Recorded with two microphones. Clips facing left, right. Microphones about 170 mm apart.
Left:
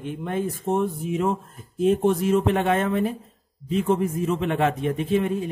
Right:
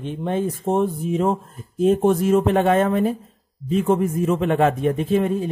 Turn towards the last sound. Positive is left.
turn(degrees=-40)  # may be behind; listen again after turning